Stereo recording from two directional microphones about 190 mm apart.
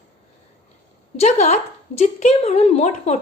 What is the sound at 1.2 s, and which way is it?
A woman's voice, 35° left (ahead or behind).